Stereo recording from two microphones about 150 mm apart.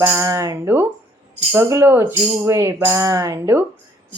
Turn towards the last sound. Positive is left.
turn(degrees=-15)  # may be behind; listen again after turning